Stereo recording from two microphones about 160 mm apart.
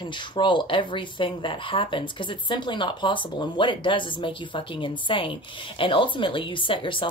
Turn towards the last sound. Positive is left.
turn(degrees=30)  # may be behind; listen again after turning